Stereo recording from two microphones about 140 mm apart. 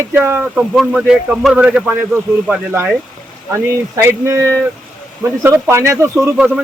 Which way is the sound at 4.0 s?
20° right (ahead or behind).